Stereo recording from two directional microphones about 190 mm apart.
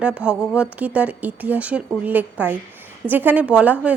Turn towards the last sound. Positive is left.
turn(degrees=-10)  # may be behind; listen again after turning